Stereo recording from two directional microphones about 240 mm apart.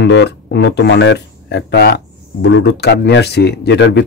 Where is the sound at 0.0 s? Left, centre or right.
Left.